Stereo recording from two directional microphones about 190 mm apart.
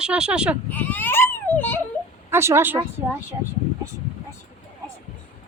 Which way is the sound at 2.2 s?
15° right (ahead or behind).